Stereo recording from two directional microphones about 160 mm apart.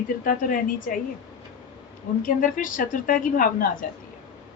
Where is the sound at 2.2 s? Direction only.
55° left (ahead or behind).